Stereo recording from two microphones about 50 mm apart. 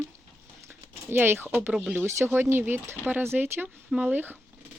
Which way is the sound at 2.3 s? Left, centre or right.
Right.